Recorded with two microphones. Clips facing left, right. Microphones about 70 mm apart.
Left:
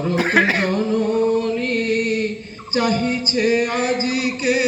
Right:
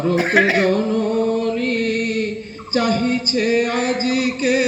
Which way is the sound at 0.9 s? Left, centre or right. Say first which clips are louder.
Left 1 dB; centre.